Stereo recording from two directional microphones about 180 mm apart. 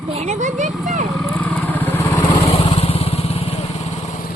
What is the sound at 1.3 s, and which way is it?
Motorcycle, 10° left (ahead or behind).